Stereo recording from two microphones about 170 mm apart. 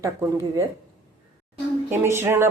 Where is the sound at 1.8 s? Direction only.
15° right (ahead or behind).